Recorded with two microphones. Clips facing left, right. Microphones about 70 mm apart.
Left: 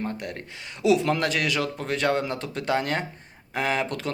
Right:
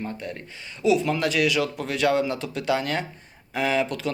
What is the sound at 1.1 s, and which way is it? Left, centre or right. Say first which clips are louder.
Speech: right 2 dB; left.